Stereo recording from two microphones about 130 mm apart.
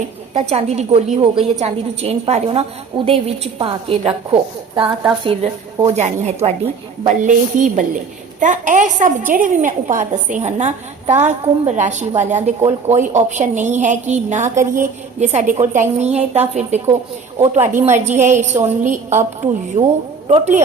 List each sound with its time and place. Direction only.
0.3 s a woman's voice: 55° right (ahead or behind)
5.2 s a woman's voice: 50° right (ahead or behind)
7.0 s a woman's voice: 75° right (ahead or behind)
20.2 s a woman's voice: 50° right (ahead or behind)